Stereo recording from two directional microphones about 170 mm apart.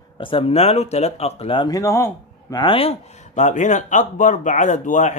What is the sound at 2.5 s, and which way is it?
Speech, 30° left (ahead or behind).